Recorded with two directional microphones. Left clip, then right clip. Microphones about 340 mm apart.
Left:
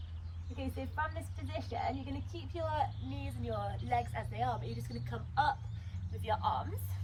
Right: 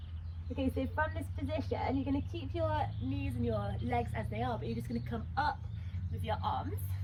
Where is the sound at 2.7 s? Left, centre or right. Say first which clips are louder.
Left 1 dB; left.